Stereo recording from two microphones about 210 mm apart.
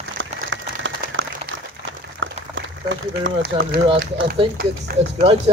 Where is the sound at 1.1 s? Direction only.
65° right (ahead or behind).